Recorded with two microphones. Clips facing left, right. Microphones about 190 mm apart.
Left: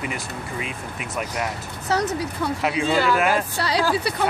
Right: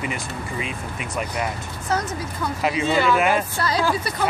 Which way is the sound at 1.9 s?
70° left (ahead or behind).